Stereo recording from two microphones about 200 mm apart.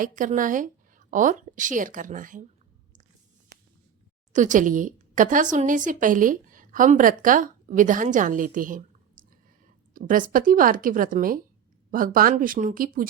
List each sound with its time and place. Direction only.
0.0 s a woman's voice: 40° right (ahead or behind)
4.3 s a woman's voice: 40° right (ahead or behind)
9.9 s a woman's voice: 40° right (ahead or behind)